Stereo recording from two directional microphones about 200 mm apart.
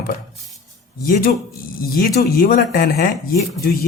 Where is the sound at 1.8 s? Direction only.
45° left (ahead or behind).